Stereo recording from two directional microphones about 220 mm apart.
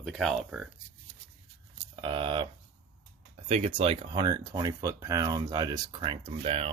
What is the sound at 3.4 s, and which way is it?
Speech, 30° right (ahead or behind).